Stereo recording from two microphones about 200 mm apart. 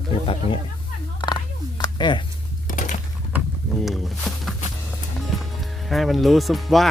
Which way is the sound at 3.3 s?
Centre (ahead or behind).